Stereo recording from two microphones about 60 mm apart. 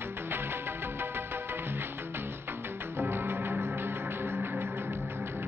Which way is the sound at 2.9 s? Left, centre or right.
Right.